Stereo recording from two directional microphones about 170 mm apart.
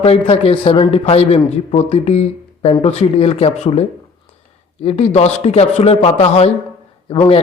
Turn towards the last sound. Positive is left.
turn(degrees=35)  # may be behind; listen again after turning